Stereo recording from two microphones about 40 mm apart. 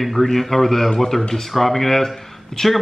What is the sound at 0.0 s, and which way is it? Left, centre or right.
Speech, centre.